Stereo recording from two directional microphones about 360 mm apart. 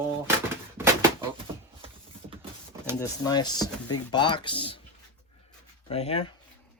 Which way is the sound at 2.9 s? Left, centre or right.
Centre.